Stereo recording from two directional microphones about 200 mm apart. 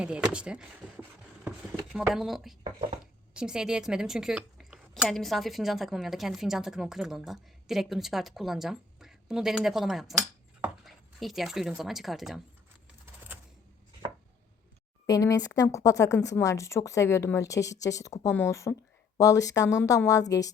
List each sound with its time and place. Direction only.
0.3 s speech: 5° right (ahead or behind)
1.5 s chopping: centre (ahead or behind)
2.1 s speech: centre (ahead or behind)
15.0 s speech: 15° left (ahead or behind)